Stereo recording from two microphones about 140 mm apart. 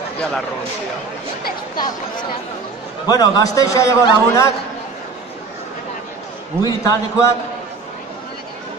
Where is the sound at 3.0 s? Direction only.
30° left (ahead or behind).